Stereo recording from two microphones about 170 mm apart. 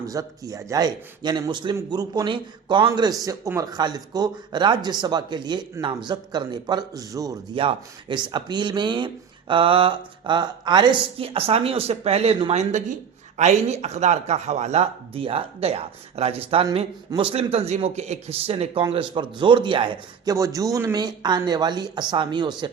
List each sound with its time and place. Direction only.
0.0 s a man's voice: 20° right (ahead or behind)
7.6 s speech: 30° right (ahead or behind)
20.3 s a man's voice: 20° right (ahead or behind)